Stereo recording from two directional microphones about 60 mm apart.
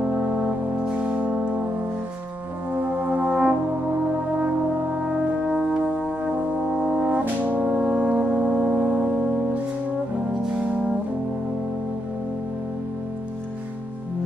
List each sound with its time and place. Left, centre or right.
0.0 s brass instrument: centre
2.7 s brass instrument: right
5.0 s brass instrument: centre